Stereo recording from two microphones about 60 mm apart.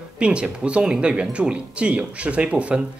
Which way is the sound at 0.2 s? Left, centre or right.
Centre.